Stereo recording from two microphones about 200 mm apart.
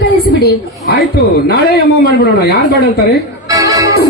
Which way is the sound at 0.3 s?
50° left (ahead or behind).